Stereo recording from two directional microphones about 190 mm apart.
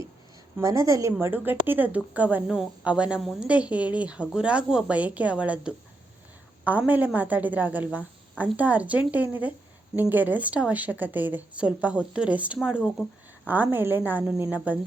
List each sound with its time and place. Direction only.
0.6 s a woman's voice: 15° right (ahead or behind)